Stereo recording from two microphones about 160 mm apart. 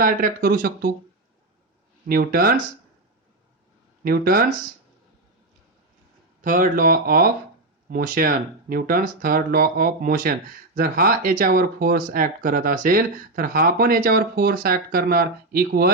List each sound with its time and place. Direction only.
0.0 s speech: 60° right (ahead or behind)
2.0 s speech: 65° right (ahead or behind)
4.0 s speech: 65° right (ahead or behind)
6.4 s speech: 55° right (ahead or behind); by 15.9 s 75° right (ahead or behind)